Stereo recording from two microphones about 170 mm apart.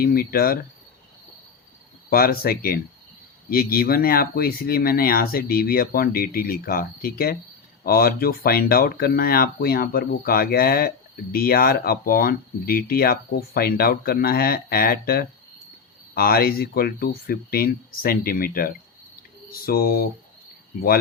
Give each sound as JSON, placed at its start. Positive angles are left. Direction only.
{"t": 0.0, "sound": "speech", "side_deg": 60}
{"t": 2.0, "sound": "speech", "side_deg": 60}